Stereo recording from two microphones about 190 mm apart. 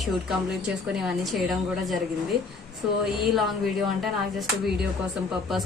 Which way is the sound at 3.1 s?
Centre (ahead or behind).